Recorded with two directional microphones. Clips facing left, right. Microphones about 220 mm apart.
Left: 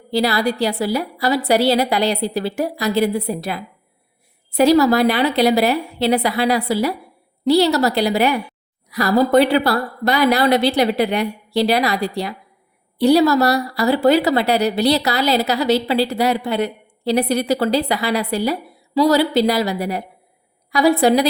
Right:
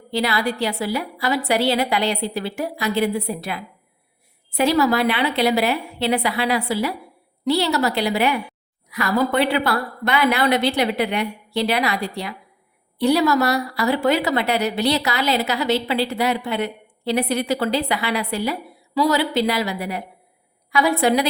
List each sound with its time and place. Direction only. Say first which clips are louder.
0.1 s a woman's voice: left 4 dB; 40° left (ahead or behind)